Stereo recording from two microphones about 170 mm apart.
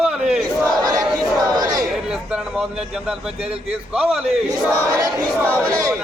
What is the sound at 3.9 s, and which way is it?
Speech, 5° right (ahead or behind).